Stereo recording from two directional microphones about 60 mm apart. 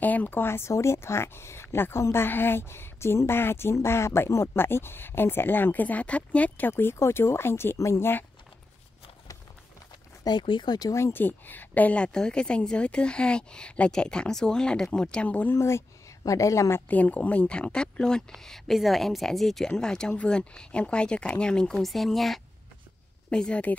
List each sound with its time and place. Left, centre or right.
0.0 s speech: left
2.2 s speech: left
6.7 s speech: left
7.7 s a woman's voice: left
8.0 s speech: left
10.3 s speech: left
11.1 s a woman's voice: left
15.5 s speech: left
16.3 s a woman's voice: left
16.8 s a woman's voice: left
21.7 s speech: centre
23.3 s a woman's voice: centre